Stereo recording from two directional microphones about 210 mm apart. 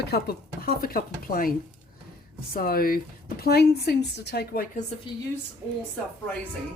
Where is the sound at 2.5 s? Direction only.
45° left (ahead or behind).